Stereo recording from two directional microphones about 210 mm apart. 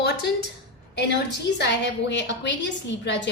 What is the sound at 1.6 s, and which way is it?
A woman's voice, 55° left (ahead or behind).